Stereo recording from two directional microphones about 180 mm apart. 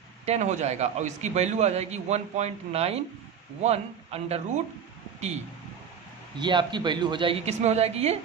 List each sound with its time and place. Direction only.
0.3 s a man's voice: 40° right (ahead or behind)
6.4 s a woman's voice: 25° right (ahead or behind)